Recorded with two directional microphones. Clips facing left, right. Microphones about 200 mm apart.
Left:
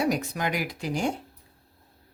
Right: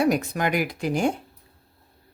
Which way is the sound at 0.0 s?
55° right (ahead or behind).